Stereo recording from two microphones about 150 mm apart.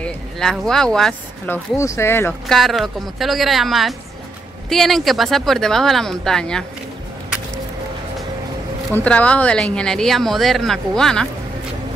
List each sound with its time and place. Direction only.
0.0 s speech: 5° left (ahead or behind)
1.8 s speech: 15° left (ahead or behind)
2.4 s speech: centre (ahead or behind)
8.9 s speech: 10° left (ahead or behind)